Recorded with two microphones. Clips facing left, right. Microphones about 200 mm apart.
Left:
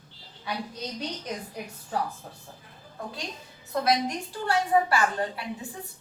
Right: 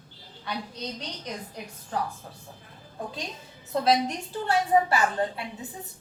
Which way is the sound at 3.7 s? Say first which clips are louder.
Right 2 dB; 25° right (ahead or behind).